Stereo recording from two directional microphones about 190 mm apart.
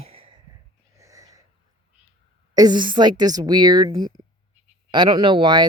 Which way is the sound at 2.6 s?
25° right (ahead or behind).